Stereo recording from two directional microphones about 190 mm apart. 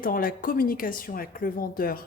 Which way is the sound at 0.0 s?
50° left (ahead or behind).